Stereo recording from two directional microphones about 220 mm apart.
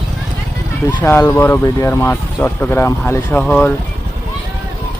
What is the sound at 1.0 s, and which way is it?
Speech, 10° left (ahead or behind).